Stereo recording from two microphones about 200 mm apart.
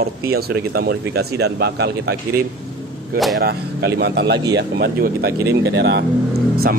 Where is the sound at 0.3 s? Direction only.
50° right (ahead or behind).